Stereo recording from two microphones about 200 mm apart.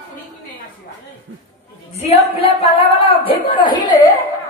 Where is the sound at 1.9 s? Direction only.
30° left (ahead or behind).